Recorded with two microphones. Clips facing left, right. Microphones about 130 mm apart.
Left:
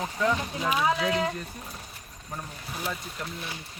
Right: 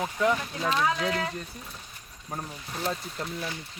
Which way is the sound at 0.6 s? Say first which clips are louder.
Left 1 dB; 10° left (ahead or behind).